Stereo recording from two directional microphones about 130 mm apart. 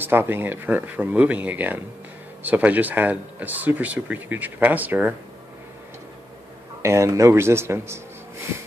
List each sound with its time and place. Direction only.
0.0 s speech: 15° right (ahead or behind)
6.8 s a man's voice: 20° right (ahead or behind)